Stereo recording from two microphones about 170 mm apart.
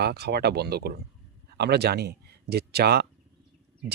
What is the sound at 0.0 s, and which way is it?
Speech, 70° right (ahead or behind).